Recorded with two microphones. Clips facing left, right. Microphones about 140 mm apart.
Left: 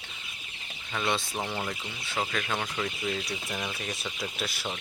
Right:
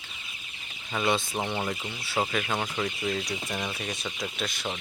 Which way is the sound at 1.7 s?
10° right (ahead or behind).